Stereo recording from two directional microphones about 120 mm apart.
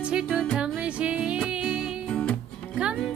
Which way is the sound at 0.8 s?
10° right (ahead or behind).